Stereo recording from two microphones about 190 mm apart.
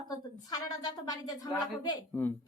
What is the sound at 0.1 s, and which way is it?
A woman's voice, 20° left (ahead or behind).